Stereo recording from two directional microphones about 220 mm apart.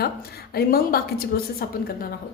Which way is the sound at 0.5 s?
45° left (ahead or behind).